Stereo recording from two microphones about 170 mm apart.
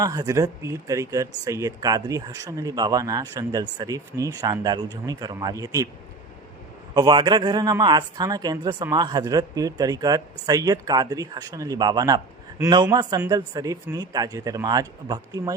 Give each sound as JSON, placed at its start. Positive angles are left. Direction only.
{"t": 0.0, "sound": "speech", "side_deg": -20}
{"t": 6.9, "sound": "speech", "side_deg": -25}